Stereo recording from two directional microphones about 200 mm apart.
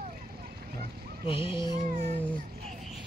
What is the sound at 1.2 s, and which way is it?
Speech, 25° left (ahead or behind).